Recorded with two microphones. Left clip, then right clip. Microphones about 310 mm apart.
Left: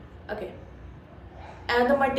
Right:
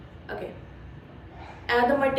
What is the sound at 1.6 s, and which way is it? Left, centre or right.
Speech, centre.